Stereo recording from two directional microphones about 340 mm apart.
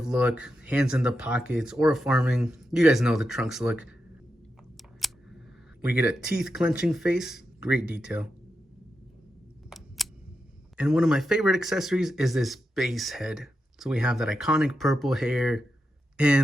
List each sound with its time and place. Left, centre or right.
0.0 s speech: centre
4.8 s a sound: centre
5.9 s speech: centre
9.6 s single-lens reflex camera: centre
10.8 s speech: centre